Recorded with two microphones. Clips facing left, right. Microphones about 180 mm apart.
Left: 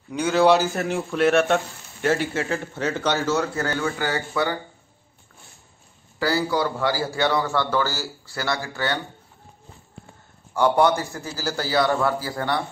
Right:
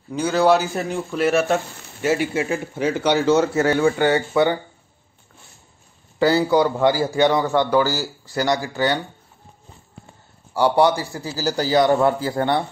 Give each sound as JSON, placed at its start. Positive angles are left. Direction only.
{"t": 0.1, "sound": "speech", "side_deg": 0}
{"t": 6.1, "sound": "speech", "side_deg": -25}
{"t": 10.9, "sound": "a man's voice", "side_deg": -15}